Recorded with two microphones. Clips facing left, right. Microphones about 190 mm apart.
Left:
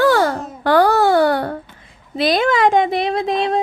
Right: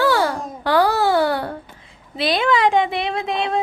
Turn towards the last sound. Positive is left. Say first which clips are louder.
# left 4 dB
turn(degrees=35)  # may be behind; listen again after turning